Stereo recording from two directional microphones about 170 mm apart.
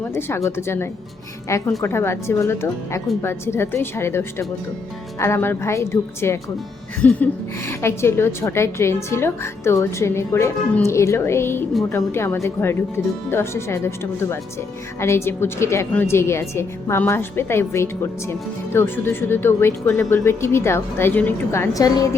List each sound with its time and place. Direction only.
0.0 s a woman's voice: 15° left (ahead or behind)